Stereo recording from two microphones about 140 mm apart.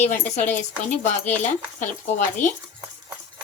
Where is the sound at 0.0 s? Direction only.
55° left (ahead or behind).